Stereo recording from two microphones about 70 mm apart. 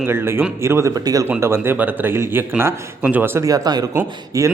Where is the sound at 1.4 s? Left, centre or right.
Right.